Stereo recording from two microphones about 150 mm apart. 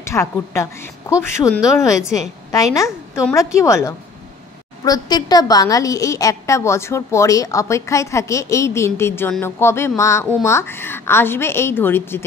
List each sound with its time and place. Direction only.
0.0 s a woman's voice: 20° left (ahead or behind)